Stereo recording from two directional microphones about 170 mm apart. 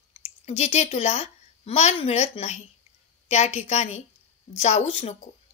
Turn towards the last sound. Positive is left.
turn(degrees=40)  # may be behind; listen again after turning